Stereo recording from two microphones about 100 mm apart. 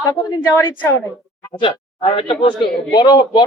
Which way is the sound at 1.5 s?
60° left (ahead or behind).